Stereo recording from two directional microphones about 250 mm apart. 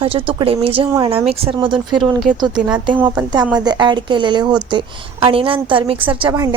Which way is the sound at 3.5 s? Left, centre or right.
Centre.